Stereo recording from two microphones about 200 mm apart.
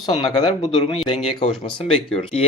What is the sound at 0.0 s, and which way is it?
Speech, 20° left (ahead or behind).